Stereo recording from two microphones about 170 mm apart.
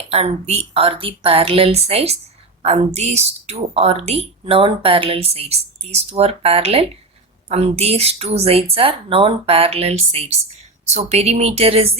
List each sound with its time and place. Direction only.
0.1 s a woman's voice: 40° right (ahead or behind)